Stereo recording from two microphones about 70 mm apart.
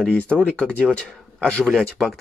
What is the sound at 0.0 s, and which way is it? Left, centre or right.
Speech, centre.